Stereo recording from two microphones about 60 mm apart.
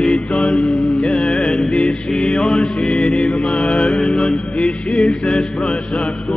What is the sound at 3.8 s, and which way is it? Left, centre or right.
Mantra, centre.